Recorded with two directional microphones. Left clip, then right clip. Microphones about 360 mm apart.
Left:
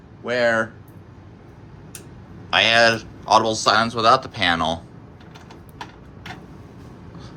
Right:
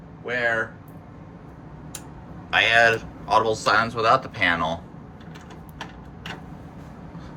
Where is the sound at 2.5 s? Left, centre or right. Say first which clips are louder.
Left 2 dB; centre.